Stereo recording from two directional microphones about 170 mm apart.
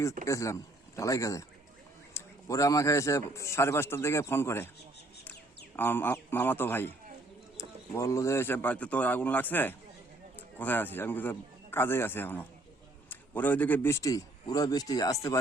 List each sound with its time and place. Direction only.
0.3 s a man's voice: 20° left (ahead or behind)
5.7 s speech: 10° left (ahead or behind)
7.9 s a man's voice: 20° left (ahead or behind)